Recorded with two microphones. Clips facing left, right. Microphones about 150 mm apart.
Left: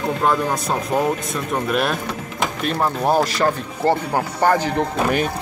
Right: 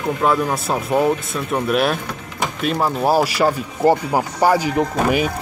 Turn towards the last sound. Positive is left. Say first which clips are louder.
# right 2 dB
turn(degrees=-10)  # may be behind; listen again after turning